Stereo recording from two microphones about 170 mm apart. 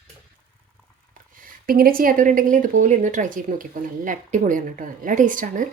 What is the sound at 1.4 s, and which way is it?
Speech, 60° right (ahead or behind).